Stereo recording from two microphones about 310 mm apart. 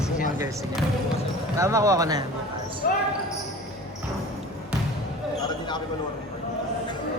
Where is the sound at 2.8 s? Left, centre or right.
Left.